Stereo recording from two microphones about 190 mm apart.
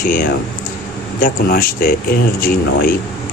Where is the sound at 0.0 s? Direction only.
45° left (ahead or behind).